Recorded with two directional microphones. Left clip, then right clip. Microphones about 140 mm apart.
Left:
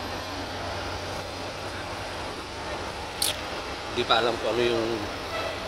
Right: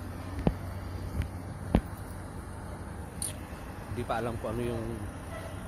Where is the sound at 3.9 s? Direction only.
10° left (ahead or behind).